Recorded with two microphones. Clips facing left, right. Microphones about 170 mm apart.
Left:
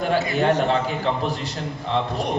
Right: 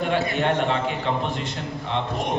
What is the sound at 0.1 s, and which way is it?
Speech, 35° left (ahead or behind).